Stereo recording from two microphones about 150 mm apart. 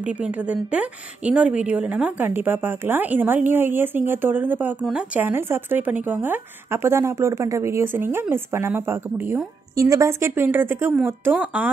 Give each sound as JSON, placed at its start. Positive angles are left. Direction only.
{"t": 0.0, "sound": "a woman's voice", "side_deg": -10}